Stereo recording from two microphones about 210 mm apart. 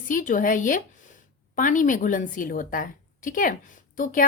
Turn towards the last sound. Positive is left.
turn(degrees=40)  # may be behind; listen again after turning